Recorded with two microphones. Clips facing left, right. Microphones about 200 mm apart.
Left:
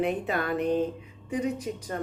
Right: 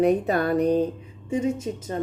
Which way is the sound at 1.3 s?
25° right (ahead or behind).